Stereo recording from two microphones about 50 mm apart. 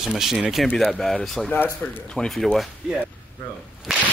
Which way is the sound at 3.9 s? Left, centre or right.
Centre.